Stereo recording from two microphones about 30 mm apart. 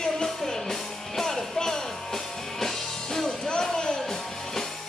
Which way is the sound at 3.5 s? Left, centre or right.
Left.